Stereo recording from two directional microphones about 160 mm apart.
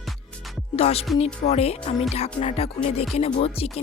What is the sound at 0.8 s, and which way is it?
Speech, 40° left (ahead or behind).